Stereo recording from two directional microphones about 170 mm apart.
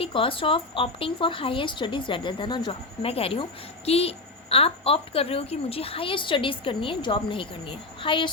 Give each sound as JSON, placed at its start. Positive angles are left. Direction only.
{"t": 0.0, "sound": "a woman's voice", "side_deg": 30}